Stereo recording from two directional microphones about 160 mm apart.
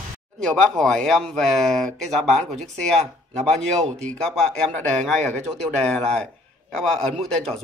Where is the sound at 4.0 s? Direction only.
5° left (ahead or behind).